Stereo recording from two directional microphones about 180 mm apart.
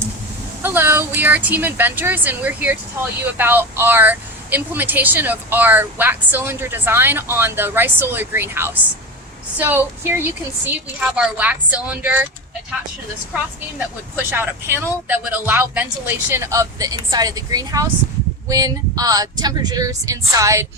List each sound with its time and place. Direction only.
0.6 s speech: 10° right (ahead or behind)
13.7 s speech: 10° right (ahead or behind)